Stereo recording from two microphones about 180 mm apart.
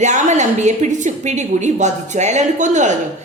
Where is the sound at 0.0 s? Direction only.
40° right (ahead or behind).